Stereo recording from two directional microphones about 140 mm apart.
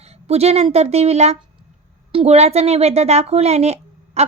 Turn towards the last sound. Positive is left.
turn(degrees=-50)  # may be behind; listen again after turning